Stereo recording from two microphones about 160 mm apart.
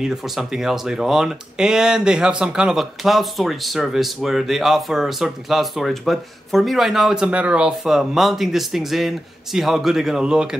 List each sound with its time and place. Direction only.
0.0 s speech: centre (ahead or behind)